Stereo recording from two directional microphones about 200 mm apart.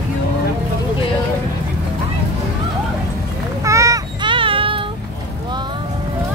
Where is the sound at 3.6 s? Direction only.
15° right (ahead or behind).